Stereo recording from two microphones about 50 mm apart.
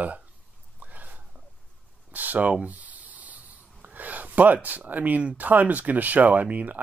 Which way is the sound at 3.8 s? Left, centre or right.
Right.